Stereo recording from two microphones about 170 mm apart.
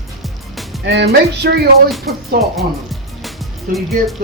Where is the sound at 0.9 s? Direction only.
80° right.